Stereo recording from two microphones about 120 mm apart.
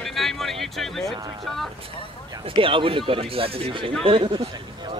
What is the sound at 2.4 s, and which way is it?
Speech, 45° right (ahead or behind).